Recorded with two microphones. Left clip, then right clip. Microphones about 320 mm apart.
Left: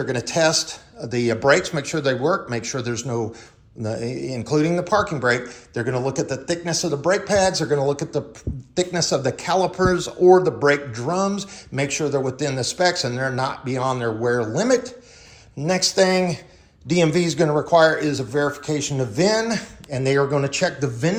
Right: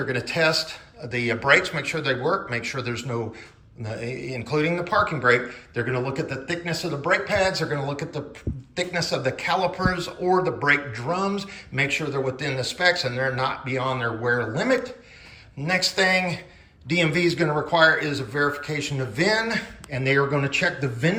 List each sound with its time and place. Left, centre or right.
0.1 s speech: centre